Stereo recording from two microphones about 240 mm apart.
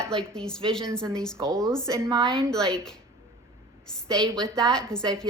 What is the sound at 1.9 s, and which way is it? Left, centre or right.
Speech, centre.